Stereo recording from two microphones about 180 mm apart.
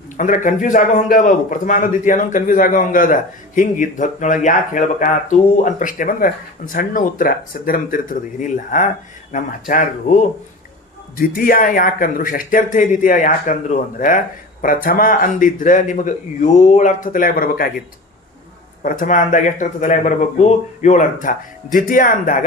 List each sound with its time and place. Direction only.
0.2 s a man's voice: 45° left (ahead or behind)
11.2 s a man's voice: 55° left (ahead or behind)
18.8 s a man's voice: 50° left (ahead or behind)